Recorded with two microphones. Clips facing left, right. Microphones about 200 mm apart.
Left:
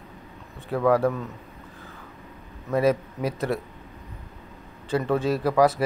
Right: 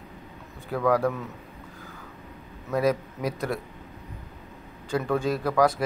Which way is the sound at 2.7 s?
5° left (ahead or behind).